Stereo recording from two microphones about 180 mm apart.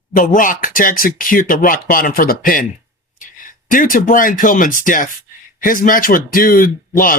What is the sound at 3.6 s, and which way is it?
Speech, 50° left (ahead or behind).